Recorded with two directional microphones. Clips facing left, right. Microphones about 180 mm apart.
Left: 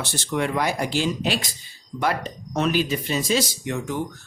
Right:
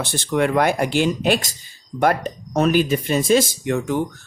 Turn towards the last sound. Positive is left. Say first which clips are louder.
# right 6 dB
turn(degrees=-55)  # may be behind; listen again after turning